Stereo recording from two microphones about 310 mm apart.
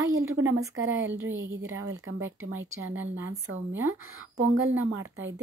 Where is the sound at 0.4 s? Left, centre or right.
Centre.